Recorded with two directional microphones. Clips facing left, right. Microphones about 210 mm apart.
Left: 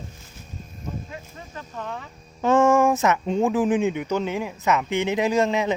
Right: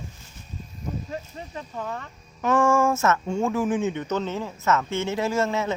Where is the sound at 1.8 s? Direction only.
Centre (ahead or behind).